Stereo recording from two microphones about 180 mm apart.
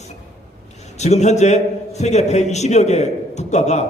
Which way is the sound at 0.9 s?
40° left (ahead or behind).